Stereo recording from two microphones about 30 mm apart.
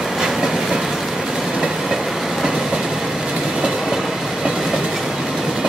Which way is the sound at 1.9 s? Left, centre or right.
Centre.